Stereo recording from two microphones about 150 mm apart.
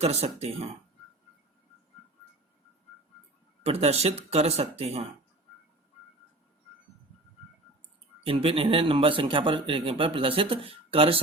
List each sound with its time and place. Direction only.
0.0 s speech: 45° right (ahead or behind)
3.6 s speech: 45° right (ahead or behind)
8.2 s a man's voice: 40° right (ahead or behind)